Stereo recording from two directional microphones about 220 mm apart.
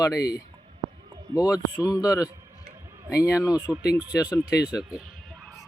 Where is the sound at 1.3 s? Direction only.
15° left (ahead or behind).